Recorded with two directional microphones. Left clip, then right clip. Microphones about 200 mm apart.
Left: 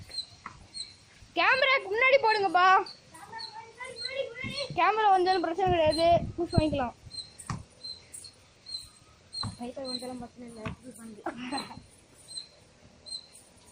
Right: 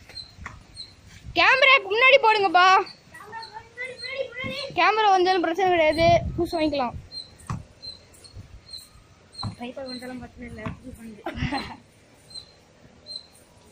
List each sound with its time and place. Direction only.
1.3 s speech: 10° right (ahead or behind)
4.7 s a child's voice: 10° right (ahead or behind)
7.5 s rodents: 15° right (ahead or behind)
9.6 s speech: 20° left (ahead or behind)
11.3 s a child's voice: 5° right (ahead or behind)